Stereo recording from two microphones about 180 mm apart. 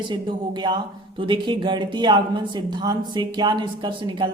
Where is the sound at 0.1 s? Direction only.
25° right (ahead or behind).